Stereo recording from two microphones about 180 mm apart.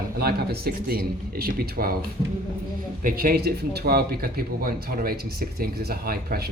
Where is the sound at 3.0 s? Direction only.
55° right (ahead or behind).